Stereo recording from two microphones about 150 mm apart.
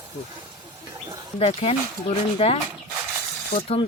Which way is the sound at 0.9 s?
25° right (ahead or behind).